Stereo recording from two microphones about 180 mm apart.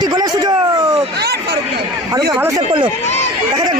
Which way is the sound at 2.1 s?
20° right (ahead or behind).